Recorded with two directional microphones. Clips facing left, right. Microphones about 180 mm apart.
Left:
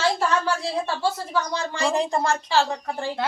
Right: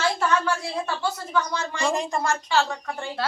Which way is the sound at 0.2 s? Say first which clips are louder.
Even; 30° left (ahead or behind).